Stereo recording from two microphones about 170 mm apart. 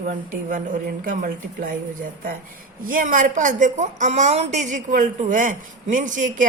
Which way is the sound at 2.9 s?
50° right (ahead or behind).